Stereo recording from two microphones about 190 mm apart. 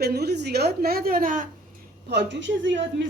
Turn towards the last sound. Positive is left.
turn(degrees=-75)  # may be behind; listen again after turning